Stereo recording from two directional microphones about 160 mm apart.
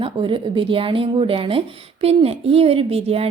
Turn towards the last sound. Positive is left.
turn(degrees=-40)  # may be behind; listen again after turning